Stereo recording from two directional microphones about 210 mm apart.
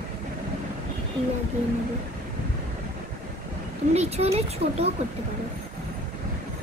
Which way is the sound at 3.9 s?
30° right (ahead or behind).